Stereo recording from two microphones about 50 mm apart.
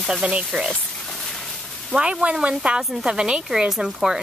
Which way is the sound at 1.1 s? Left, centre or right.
Centre.